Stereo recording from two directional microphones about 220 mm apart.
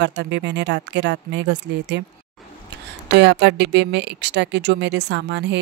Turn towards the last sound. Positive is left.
turn(degrees=-50)  # may be behind; listen again after turning